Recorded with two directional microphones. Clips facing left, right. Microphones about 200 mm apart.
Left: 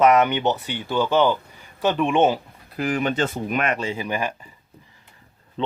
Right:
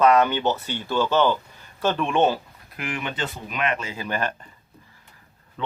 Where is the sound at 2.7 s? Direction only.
40° left (ahead or behind).